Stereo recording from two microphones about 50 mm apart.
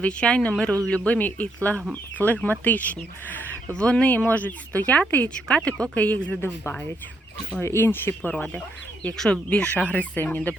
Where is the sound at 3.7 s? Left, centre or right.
Left.